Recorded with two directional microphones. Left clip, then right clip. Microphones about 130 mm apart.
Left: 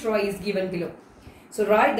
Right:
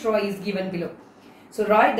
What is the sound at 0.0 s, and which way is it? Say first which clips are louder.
Speech: right 1 dB; 25° left (ahead or behind).